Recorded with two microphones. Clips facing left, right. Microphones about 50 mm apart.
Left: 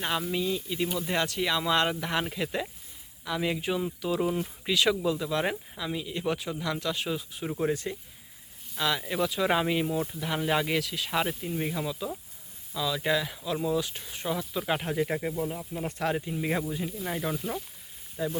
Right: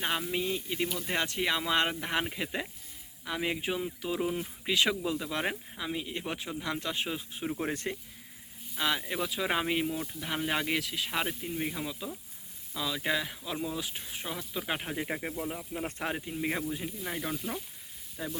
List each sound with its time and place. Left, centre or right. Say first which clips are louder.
0.0 s speech: left 2 dB; centre
0.3 s speech: left 2 dB; right
0.9 s speech: left 3 dB; centre
4.7 s speech: left 3 dB; centre
7.7 s speech: left 4 dB; right
9.0 s speech: left 5 dB; centre